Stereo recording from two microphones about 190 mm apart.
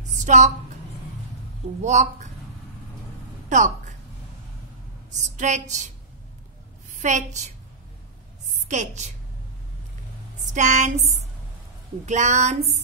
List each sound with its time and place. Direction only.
0.2 s a woman's voice: 40° right (ahead or behind)
1.8 s a woman's voice: 40° right (ahead or behind)
3.4 s a sound: 40° right (ahead or behind)
5.4 s a woman's voice: 40° right (ahead or behind)
7.0 s a woman's voice: 40° right (ahead or behind)
8.6 s a woman's voice: 40° right (ahead or behind)
10.5 s a woman's voice: 40° right (ahead or behind)